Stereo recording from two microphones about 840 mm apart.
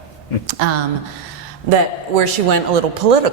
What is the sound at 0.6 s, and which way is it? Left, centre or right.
Speech, right.